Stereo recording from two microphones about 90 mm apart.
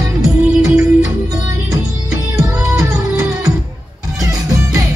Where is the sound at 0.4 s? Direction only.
10° right (ahead or behind).